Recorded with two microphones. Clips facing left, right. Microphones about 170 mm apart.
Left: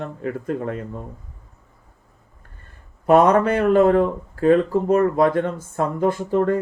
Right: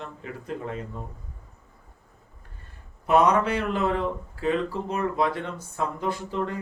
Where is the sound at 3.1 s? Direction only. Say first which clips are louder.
Left 6 dB; 50° left (ahead or behind).